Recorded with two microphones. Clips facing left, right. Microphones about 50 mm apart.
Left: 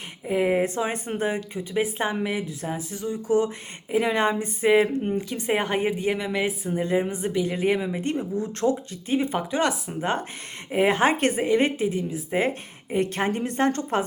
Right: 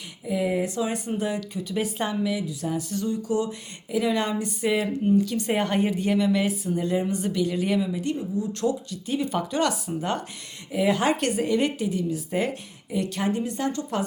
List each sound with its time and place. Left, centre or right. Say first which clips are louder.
0.3 s a woman's voice: left 3 dB; left
2.1 s a woman's voice: right 1 dB; left
2.7 s speech: right 3 dB; centre
3.9 s speech: left 2 dB; left
7.8 s a woman's voice: even; left
8.6 s a woman's voice: left 5 dB; left